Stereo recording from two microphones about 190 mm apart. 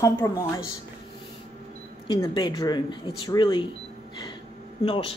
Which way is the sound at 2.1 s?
20° left (ahead or behind).